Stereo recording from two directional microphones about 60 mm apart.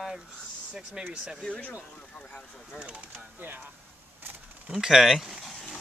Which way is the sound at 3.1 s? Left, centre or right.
Right.